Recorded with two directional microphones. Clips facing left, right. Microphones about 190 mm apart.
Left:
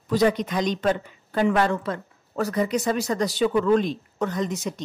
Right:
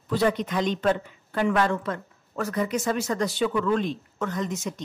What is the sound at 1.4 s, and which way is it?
A woman's voice, 35° left (ahead or behind).